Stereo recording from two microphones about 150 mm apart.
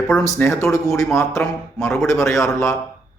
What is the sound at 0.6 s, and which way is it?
A man's voice, 20° left (ahead or behind).